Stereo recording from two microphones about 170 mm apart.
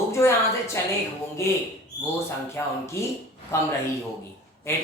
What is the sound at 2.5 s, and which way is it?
Speech, 15° left (ahead or behind).